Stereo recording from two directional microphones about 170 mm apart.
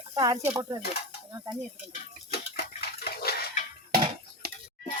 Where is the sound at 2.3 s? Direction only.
65° left (ahead or behind).